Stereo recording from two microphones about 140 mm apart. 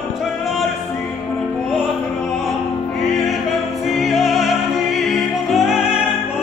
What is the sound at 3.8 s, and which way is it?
Music, centre (ahead or behind).